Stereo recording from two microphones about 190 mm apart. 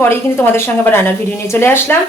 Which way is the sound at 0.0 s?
15° left (ahead or behind).